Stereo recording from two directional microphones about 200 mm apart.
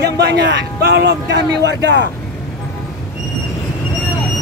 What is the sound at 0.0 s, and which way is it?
Speech, 60° right (ahead or behind).